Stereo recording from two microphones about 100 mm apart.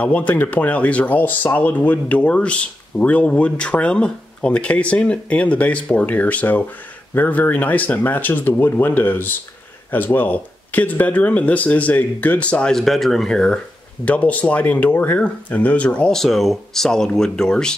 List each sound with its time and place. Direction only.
0.0 s speech: 15° left (ahead or behind)